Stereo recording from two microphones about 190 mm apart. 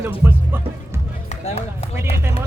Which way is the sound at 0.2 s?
10° right (ahead or behind).